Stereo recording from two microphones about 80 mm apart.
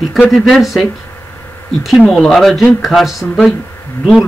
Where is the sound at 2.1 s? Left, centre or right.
Centre.